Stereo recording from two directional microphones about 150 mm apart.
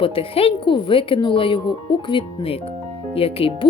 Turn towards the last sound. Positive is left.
turn(degrees=40)  # may be behind; listen again after turning